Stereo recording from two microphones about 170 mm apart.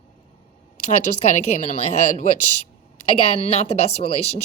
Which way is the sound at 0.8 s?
40° left (ahead or behind).